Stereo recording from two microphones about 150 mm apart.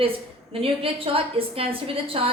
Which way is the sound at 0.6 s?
40° right (ahead or behind).